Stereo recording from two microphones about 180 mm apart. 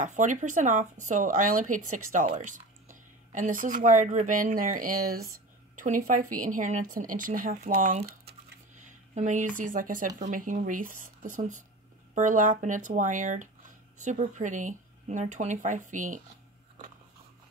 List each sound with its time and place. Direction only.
0.0 s speech: 45° right (ahead or behind)
8.8 s a sound: 45° right (ahead or behind)
9.6 s speech: 50° right (ahead or behind)